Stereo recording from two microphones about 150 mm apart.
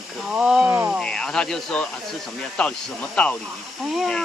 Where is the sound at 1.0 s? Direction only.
5° left (ahead or behind).